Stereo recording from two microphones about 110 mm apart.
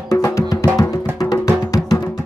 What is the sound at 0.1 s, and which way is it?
Music, 30° left (ahead or behind).